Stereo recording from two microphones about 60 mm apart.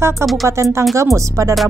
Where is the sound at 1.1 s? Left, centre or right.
Right.